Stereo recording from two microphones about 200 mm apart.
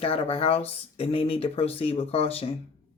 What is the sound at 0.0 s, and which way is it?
Speech, 30° left (ahead or behind).